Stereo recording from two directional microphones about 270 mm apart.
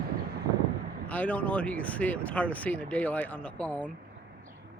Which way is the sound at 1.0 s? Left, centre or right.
Centre.